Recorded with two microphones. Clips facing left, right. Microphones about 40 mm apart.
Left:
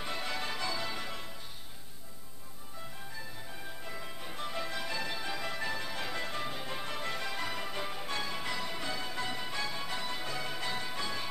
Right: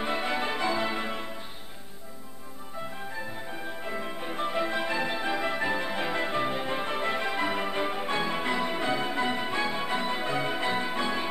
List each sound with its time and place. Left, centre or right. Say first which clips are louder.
0.0 s music: right 8 dB; right
3.2 s music: right 8 dB; right